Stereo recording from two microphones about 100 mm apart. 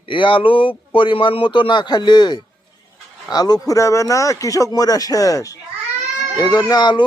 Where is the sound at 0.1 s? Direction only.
55° left (ahead or behind); by 5.5 s 35° left (ahead or behind).